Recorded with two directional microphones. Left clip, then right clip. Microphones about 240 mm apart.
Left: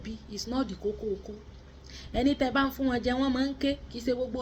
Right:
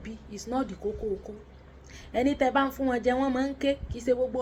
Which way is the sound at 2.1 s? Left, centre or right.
Centre.